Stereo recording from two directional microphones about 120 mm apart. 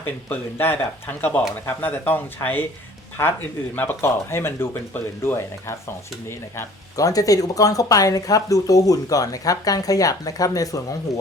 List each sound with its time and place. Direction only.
0.0 s speech: 20° left (ahead or behind)